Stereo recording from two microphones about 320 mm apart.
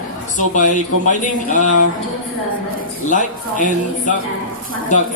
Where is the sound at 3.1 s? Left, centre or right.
Left.